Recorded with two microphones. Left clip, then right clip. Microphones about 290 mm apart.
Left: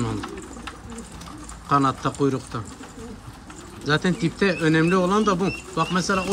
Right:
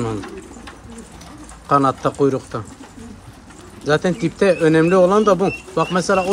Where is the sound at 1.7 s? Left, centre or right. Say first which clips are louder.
Right 5 dB; centre.